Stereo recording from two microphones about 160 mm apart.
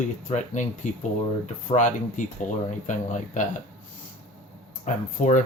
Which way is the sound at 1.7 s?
50° left (ahead or behind).